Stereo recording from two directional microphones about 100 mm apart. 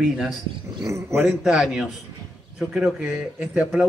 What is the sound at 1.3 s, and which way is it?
A man's voice, 5° right (ahead or behind).